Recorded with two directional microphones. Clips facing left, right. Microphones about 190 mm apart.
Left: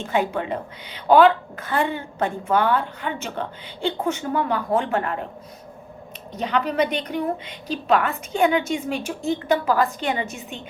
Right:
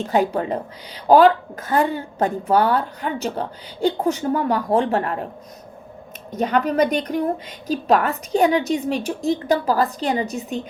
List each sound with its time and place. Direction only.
0.0 s a woman's voice: 40° right (ahead or behind)
6.3 s a woman's voice: 45° right (ahead or behind)